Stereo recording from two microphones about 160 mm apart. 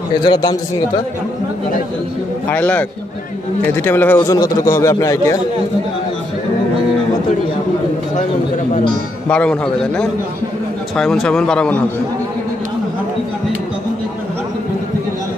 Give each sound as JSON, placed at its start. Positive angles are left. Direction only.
{"t": 0.2, "sound": "a man's voice", "side_deg": 30}
{"t": 2.5, "sound": "a man's voice", "side_deg": 10}
{"t": 9.3, "sound": "a man's voice", "side_deg": 5}